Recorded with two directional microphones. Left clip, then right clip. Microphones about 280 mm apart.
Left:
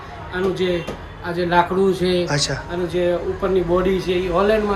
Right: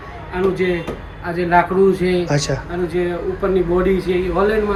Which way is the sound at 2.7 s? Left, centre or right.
Centre.